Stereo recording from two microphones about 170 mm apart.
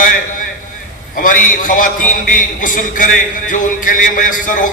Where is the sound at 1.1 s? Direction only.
50° left (ahead or behind).